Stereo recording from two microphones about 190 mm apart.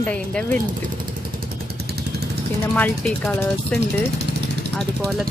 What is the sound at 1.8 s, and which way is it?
Vehicle, 60° right (ahead or behind).